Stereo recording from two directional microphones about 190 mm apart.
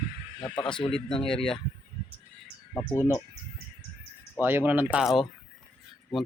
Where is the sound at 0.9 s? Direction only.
5° left (ahead or behind).